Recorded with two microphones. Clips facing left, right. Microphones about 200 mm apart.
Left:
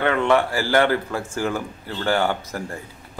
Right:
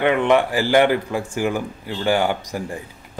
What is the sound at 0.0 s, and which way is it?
Speech, 15° right (ahead or behind).